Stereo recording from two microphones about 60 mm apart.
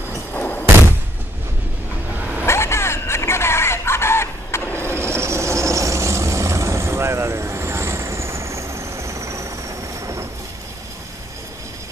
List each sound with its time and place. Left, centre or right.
0.3 s a sound: left
2.4 s chicken: left
4.8 s vehicle: right